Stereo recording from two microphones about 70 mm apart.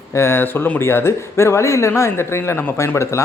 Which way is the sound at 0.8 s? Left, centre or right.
Left.